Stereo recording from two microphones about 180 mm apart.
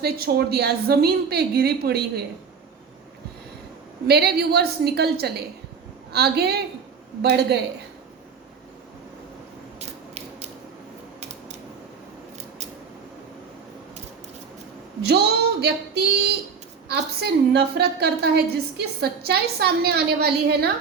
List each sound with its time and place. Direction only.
0.0 s a woman's voice: 60° right (ahead or behind)
4.0 s a woman's voice: 60° right (ahead or behind)
15.0 s a woman's voice: 65° right (ahead or behind)